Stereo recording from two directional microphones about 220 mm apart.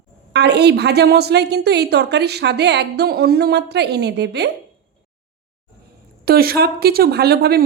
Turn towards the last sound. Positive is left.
turn(degrees=-45)  # may be behind; listen again after turning